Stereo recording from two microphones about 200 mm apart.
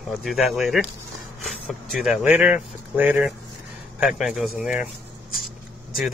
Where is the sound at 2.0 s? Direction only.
5° right (ahead or behind).